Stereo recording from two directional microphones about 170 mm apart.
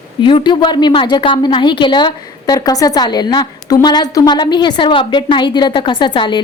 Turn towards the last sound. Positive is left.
turn(degrees=25)  # may be behind; listen again after turning